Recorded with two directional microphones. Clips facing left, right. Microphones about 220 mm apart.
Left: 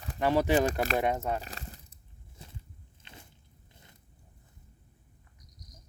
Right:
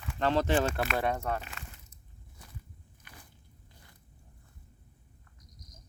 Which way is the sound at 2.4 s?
25° left (ahead or behind).